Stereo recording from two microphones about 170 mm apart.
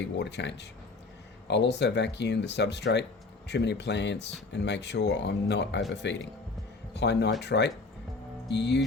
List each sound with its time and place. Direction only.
0.0 s speech: 90° left